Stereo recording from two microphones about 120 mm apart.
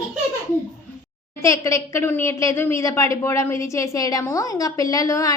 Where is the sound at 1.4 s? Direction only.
25° left (ahead or behind).